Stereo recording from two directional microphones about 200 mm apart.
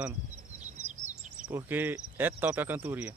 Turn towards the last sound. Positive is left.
turn(degrees=-10)  # may be behind; listen again after turning